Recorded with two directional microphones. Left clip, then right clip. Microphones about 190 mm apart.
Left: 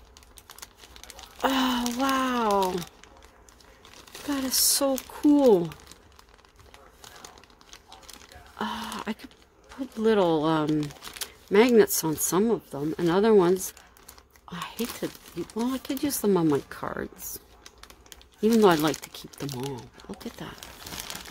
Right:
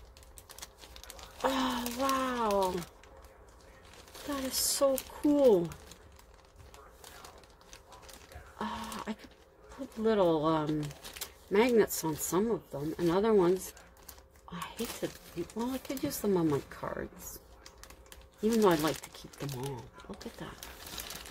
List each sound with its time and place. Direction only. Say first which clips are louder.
0.5 s typing: left 3 dB; 10° left (ahead or behind)
1.4 s a sound: left 6 dB; 45° left (ahead or behind)
4.5 s speech: left 4 dB; 45° left (ahead or behind)
8.5 s a sound: left 6 dB; 45° left (ahead or behind)
10.0 s speech: left 5 dB; 50° left (ahead or behind)
15.5 s speech: left 7 dB; 50° left (ahead or behind)
18.4 s speech: left 7 dB; 50° left (ahead or behind)
19.4 s speech: left 6 dB; 15° left (ahead or behind)
20.1 s speech: left 6 dB; 40° left (ahead or behind)